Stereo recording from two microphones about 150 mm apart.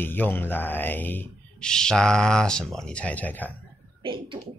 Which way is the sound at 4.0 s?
35° right (ahead or behind).